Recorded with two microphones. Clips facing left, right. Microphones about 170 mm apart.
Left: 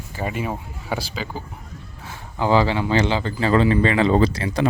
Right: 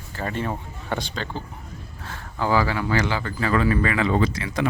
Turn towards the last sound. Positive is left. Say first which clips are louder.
# left 4 dB
turn(degrees=35)  # may be behind; listen again after turning